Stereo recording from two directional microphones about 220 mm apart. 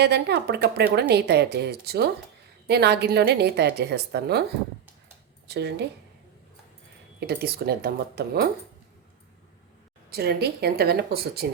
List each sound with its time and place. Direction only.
0.0 s a woman's voice: 50° right (ahead or behind)
7.2 s a woman's voice: 45° right (ahead or behind)
10.1 s a woman's voice: 45° right (ahead or behind)